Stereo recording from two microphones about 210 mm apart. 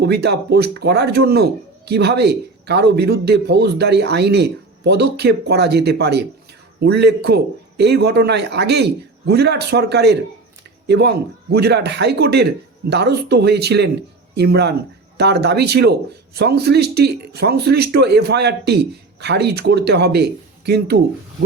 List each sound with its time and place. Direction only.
0.0 s speech: 50° right (ahead or behind)